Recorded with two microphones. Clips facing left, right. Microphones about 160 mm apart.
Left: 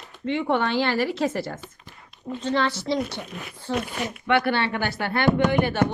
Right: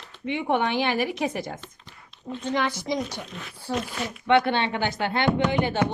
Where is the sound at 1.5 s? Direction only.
10° left (ahead or behind).